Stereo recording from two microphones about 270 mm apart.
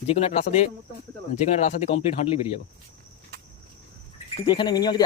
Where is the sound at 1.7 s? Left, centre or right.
Left.